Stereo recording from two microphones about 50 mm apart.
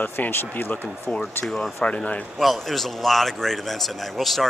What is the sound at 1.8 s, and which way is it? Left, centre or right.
Speech, left.